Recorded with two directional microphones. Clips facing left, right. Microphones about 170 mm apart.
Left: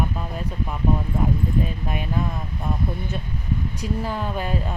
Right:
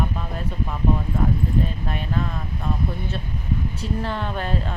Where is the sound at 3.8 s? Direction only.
10° left (ahead or behind).